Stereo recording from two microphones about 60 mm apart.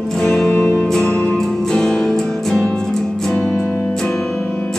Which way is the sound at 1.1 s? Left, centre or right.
Left.